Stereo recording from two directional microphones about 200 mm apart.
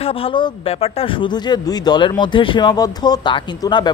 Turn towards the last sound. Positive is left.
turn(degrees=20)  # may be behind; listen again after turning